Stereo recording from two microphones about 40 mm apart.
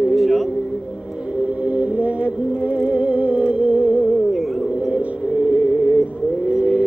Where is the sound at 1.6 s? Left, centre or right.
Right.